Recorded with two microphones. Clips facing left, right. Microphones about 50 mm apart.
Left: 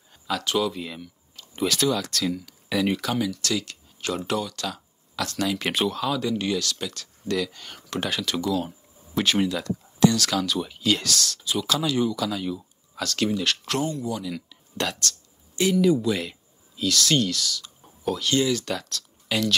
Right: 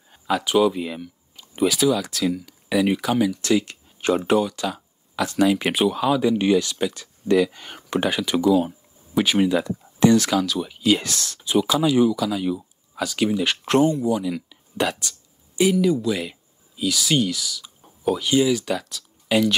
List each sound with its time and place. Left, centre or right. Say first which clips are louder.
0.1 s speech: right 5 dB; centre
10.3 s speech: right 3 dB; centre
11.0 s speech: left 2 dB; right
13.7 s speech: right 8 dB; right
15.8 s speech: even; centre